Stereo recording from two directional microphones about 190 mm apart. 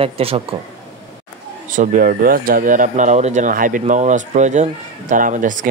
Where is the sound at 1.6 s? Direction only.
45° right (ahead or behind).